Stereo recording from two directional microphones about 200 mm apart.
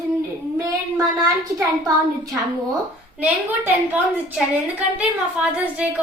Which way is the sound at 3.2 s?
10° right (ahead or behind).